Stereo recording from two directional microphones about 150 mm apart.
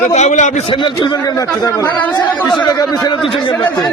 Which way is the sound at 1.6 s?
25° left (ahead or behind).